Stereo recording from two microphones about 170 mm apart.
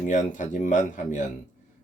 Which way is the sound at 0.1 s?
50° left (ahead or behind).